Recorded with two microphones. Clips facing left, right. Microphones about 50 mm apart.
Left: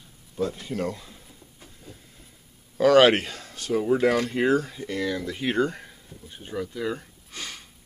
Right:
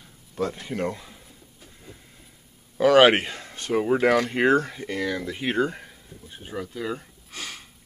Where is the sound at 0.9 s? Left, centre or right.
Centre.